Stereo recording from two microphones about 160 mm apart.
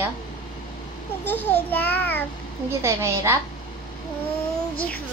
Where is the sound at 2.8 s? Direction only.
15° right (ahead or behind).